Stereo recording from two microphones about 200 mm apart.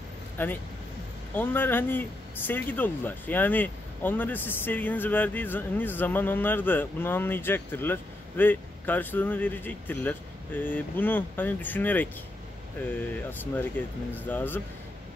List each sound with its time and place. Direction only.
0.4 s speech: 10° left (ahead or behind)